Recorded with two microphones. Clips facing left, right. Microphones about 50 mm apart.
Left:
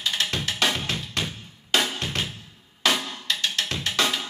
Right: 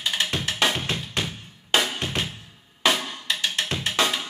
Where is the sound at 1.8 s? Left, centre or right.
Centre.